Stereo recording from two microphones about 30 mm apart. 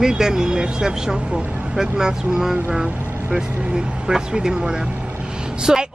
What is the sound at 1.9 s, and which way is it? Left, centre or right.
Speech, right.